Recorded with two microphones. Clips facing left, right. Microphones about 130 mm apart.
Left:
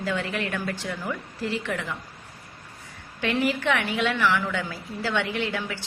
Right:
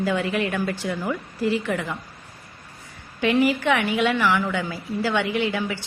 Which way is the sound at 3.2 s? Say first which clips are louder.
Right 5 dB; 10° right (ahead or behind).